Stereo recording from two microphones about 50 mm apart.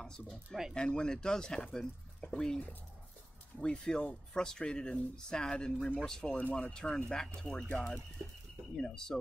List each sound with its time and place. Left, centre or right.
0.0 s speech: centre
3.6 s speech: centre
6.3 s speech: left
6.7 s speech: centre